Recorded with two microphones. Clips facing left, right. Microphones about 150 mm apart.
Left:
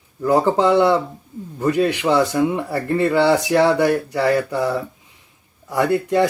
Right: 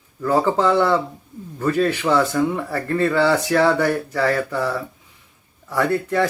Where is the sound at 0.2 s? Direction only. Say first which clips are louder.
Left 2 dB; 15° left (ahead or behind).